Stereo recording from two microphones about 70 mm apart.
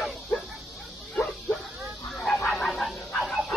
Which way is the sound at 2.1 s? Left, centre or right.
Centre.